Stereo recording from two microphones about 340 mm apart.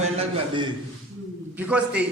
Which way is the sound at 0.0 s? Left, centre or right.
Centre.